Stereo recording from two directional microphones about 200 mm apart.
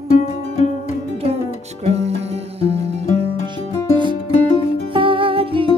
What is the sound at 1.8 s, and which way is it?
Music, 30° right (ahead or behind).